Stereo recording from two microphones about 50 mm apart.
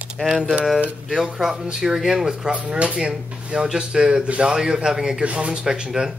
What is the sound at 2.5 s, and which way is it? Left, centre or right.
A man's voice, right.